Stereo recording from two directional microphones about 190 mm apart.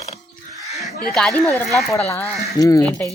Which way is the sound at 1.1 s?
5° left (ahead or behind).